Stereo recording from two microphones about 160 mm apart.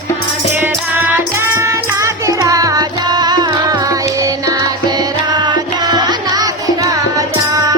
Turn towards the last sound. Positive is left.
turn(degrees=-25)  # may be behind; listen again after turning